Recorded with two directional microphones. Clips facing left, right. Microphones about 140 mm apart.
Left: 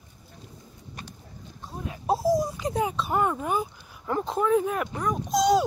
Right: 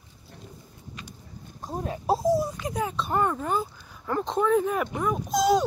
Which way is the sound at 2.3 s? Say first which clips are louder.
Left 1 dB; 15° left (ahead or behind).